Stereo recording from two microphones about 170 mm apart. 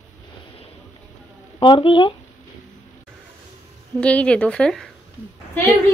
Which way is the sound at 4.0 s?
5° left (ahead or behind).